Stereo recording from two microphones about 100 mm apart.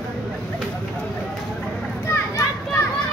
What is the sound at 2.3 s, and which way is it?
Children playing, 30° left (ahead or behind).